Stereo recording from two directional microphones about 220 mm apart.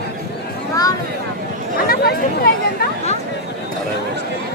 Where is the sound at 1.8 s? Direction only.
45° left (ahead or behind).